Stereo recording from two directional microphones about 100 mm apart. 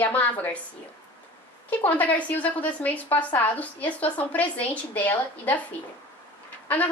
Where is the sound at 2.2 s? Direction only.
15° left (ahead or behind).